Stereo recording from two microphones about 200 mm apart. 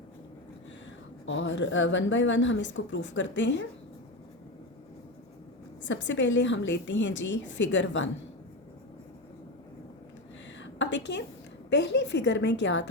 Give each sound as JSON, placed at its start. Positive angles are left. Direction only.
{"t": 1.2, "sound": "a woman's voice", "side_deg": 70}
{"t": 5.8, "sound": "a woman's voice", "side_deg": 65}
{"t": 10.6, "sound": "a sound", "side_deg": 65}
{"t": 11.7, "sound": "a woman's voice", "side_deg": 60}